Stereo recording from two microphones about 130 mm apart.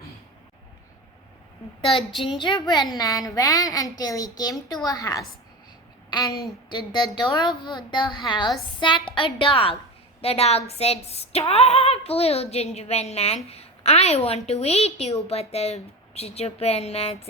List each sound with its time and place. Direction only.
2.4 s a woman's voice: 35° left (ahead or behind)
6.1 s a sound: 30° left (ahead or behind)
6.7 s a woman's voice: 35° left (ahead or behind); by 17.2 s 50° left (ahead or behind)